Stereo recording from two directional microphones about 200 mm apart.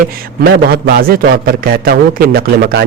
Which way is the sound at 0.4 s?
50° right (ahead or behind).